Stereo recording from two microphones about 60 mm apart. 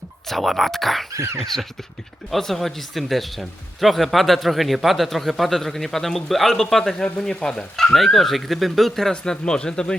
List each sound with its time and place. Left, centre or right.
0.3 s a man's voice: centre
1.1 s speech: right
1.4 s a man's voice: centre
7.9 s a man's voice: centre